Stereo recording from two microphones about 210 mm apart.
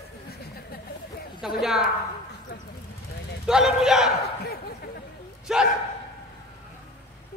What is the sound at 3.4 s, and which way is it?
Speech, centre (ahead or behind).